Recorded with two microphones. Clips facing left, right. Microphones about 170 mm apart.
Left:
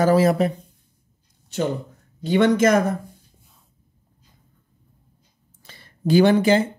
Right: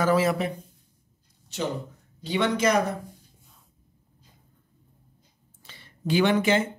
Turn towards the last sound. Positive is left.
turn(degrees=35)  # may be behind; listen again after turning